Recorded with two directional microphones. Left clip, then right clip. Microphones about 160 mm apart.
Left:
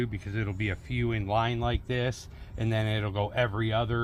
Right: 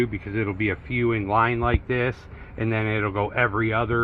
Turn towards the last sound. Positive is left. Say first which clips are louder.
# right 7 dB
turn(degrees=90)